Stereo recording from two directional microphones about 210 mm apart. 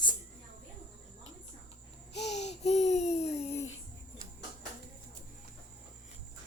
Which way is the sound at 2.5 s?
30° left (ahead or behind).